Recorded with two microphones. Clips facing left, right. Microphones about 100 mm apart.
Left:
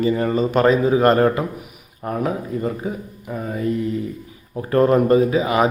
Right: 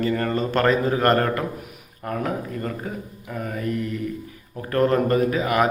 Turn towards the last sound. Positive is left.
turn(degrees=20)  # may be behind; listen again after turning